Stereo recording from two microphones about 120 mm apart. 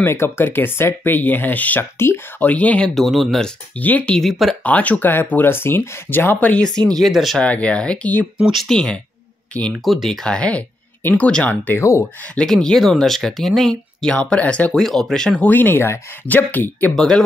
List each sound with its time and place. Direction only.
0.0 s speech: 20° left (ahead or behind); by 4.6 s centre (ahead or behind)
4.6 s speech: 10° left (ahead or behind)
7.4 s speech: 10° left (ahead or behind)
8.4 s speech: centre (ahead or behind); by 12.0 s 20° left (ahead or behind)
12.0 s speech: 10° left (ahead or behind)
16.9 s speech: 5° left (ahead or behind)